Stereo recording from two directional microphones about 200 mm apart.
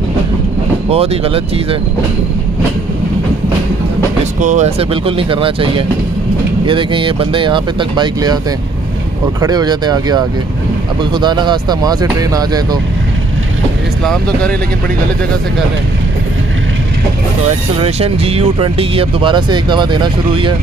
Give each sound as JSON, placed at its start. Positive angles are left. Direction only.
{"t": 0.8, "sound": "speech", "side_deg": -30}
{"t": 4.4, "sound": "speech", "side_deg": -35}
{"t": 9.4, "sound": "speech", "side_deg": -20}
{"t": 14.0, "sound": "speech", "side_deg": 5}
{"t": 17.7, "sound": "speech", "side_deg": -30}